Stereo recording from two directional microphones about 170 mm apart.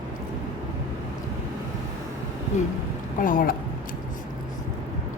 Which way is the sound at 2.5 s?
45° left (ahead or behind).